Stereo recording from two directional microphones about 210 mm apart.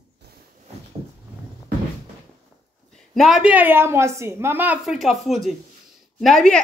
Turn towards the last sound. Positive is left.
turn(degrees=0)  # may be behind; listen again after turning